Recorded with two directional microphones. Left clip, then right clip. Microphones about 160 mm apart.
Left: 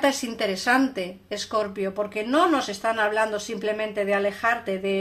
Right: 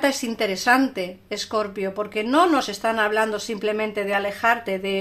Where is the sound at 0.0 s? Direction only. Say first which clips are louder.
Right 1 dB; 25° right (ahead or behind).